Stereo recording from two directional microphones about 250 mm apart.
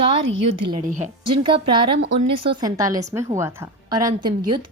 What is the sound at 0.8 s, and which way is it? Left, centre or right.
Speech, right.